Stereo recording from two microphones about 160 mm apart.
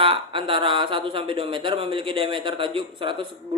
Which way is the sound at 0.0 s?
35° right (ahead or behind).